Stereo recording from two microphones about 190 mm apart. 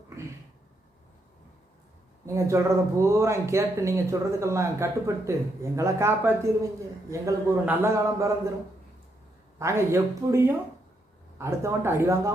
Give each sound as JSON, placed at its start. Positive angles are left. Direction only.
{"t": 2.2, "sound": "speech", "side_deg": -15}
{"t": 9.6, "sound": "speech", "side_deg": -15}